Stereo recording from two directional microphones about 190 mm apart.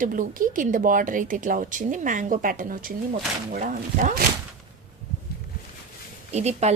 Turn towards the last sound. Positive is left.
turn(degrees=-35)  # may be behind; listen again after turning